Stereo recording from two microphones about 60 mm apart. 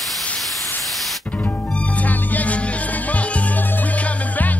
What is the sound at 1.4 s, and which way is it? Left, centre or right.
Music, left.